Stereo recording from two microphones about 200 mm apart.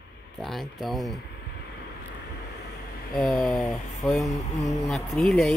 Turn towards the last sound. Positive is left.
turn(degrees=5)  # may be behind; listen again after turning